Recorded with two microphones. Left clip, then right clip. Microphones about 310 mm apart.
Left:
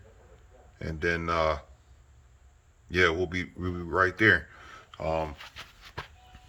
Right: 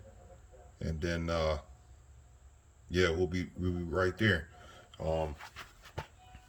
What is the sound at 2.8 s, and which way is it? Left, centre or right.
Speech, centre.